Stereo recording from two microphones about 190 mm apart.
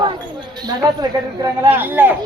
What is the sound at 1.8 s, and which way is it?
Speech, 10° right (ahead or behind).